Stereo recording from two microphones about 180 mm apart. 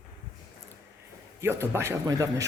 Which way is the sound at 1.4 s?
15° right (ahead or behind).